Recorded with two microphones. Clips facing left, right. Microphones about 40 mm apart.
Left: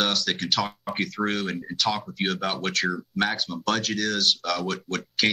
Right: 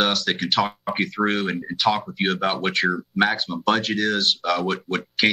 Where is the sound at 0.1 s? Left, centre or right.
Centre.